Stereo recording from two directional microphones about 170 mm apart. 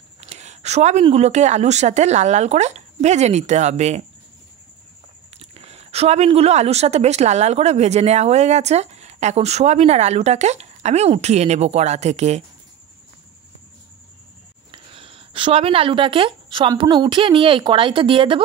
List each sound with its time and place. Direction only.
0.2 s speech: 40° right (ahead or behind)
5.4 s speech: 35° right (ahead or behind)
14.7 s speech: 30° right (ahead or behind)